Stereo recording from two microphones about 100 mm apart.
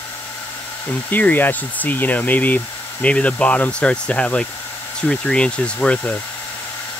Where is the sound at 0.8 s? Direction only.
15° left (ahead or behind).